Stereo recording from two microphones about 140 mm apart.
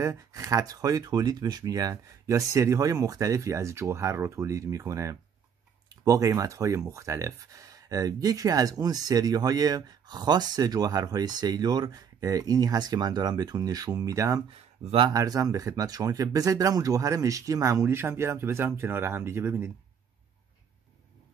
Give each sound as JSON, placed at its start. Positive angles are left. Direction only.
{"t": 0.0, "sound": "speech", "side_deg": -25}